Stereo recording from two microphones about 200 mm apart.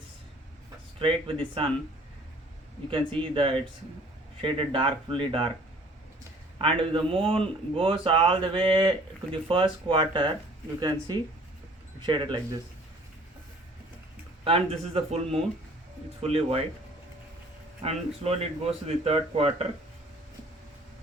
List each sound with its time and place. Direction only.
0.9 s speech: 25° right (ahead or behind)
3.3 s speech: 25° right (ahead or behind)
6.6 s speech: 25° right (ahead or behind)
14.4 s speech: 30° right (ahead or behind)
17.8 s speech: 30° right (ahead or behind)